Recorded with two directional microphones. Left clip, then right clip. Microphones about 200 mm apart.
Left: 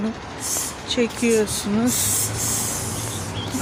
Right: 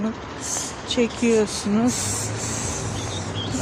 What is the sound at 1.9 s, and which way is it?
Rub, 55° left (ahead or behind).